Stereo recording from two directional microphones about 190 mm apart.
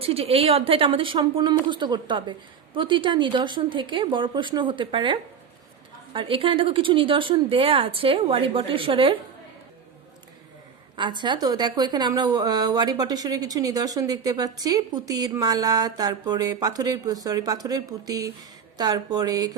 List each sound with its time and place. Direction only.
0.0 s a woman's voice: 30° right (ahead or behind)
10.9 s a woman's voice: 25° right (ahead or behind)